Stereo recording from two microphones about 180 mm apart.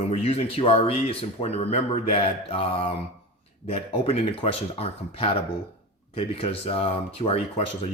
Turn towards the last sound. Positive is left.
turn(degrees=35)  # may be behind; listen again after turning